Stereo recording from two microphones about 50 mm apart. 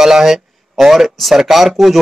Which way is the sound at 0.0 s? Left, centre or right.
Centre.